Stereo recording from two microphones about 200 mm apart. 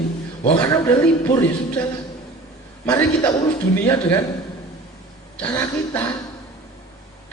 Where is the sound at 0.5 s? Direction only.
20° left (ahead or behind).